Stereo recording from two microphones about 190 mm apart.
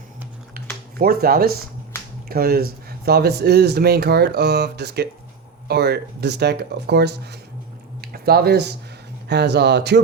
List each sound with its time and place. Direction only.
0.9 s speech: 55° right (ahead or behind)